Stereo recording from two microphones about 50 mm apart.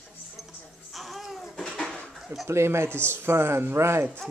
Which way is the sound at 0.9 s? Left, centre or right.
Centre.